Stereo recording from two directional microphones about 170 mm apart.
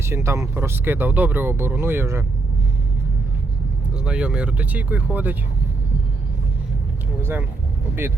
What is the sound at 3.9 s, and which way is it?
Speech, 5° right (ahead or behind).